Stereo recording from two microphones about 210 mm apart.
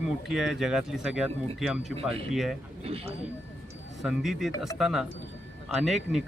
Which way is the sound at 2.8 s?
25° right (ahead or behind).